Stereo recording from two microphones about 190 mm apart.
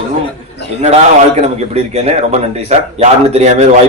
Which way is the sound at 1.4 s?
35° right (ahead or behind).